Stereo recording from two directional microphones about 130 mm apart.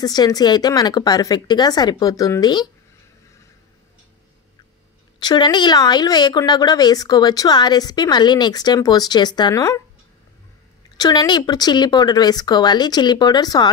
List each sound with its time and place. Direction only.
0.0 s speech: 30° left (ahead or behind)
5.2 s speech: 35° left (ahead or behind)
11.0 s speech: 30° left (ahead or behind)